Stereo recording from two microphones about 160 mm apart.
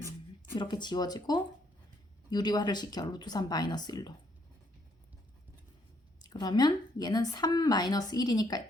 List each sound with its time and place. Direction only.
0.5 s speech: 30° left (ahead or behind)
6.2 s speech: 25° left (ahead or behind)